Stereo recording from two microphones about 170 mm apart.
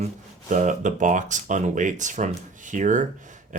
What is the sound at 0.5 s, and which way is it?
Speech, 45° right (ahead or behind).